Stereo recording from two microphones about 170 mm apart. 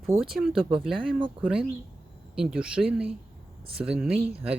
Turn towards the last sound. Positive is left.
turn(degrees=-5)  # may be behind; listen again after turning